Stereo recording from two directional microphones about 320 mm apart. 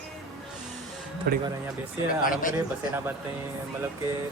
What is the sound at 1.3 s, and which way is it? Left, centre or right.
Speech, right.